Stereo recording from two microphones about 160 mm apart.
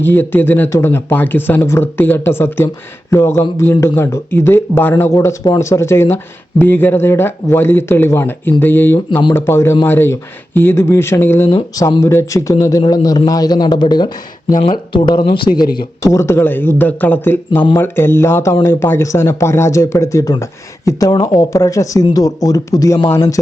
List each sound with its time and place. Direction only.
0.0 s speech: 10° left (ahead or behind)
16.0 s speech: 15° left (ahead or behind)